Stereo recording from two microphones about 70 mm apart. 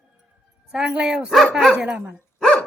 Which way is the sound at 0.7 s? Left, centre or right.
Centre.